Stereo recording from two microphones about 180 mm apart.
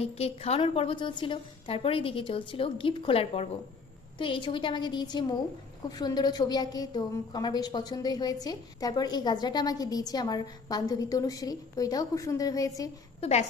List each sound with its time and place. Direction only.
0.0 s a woman's voice: 35° left (ahead or behind); by 12.9 s 20° left (ahead or behind)
13.2 s a woman's voice: 35° left (ahead or behind)